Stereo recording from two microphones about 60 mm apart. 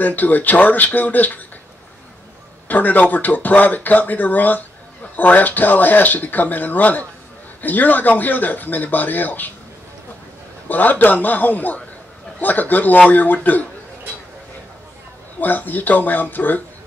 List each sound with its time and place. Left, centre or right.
0.0 s speech: left
2.7 s speech: left
10.7 s speech: left
15.4 s speech: left